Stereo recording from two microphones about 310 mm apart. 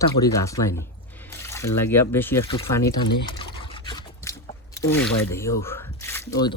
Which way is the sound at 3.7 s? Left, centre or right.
Centre.